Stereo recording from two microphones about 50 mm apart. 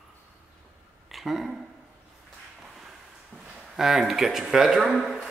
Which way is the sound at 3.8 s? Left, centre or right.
Centre.